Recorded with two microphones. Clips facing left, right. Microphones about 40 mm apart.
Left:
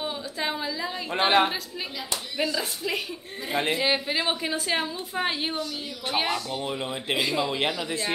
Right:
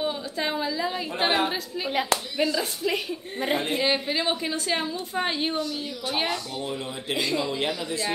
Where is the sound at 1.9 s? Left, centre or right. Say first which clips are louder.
Right 15 dB; right.